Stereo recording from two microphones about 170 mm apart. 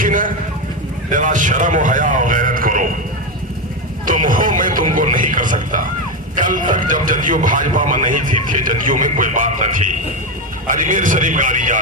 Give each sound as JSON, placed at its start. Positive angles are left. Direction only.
{"t": 0.0, "sound": "vehicle", "side_deg": -50}
{"t": 1.1, "sound": "a man's voice", "side_deg": -50}
{"t": 4.0, "sound": "a sound", "side_deg": -50}
{"t": 6.3, "sound": "speech", "side_deg": -50}